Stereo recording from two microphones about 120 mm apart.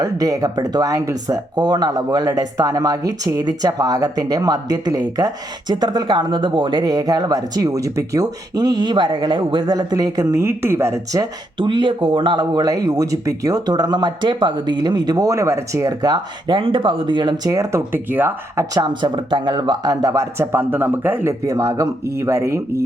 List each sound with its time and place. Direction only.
0.0 s speech: 30° right (ahead or behind)
11.5 s speech: 40° right (ahead or behind); by 18.6 s 15° right (ahead or behind)
18.7 s speech: 35° right (ahead or behind)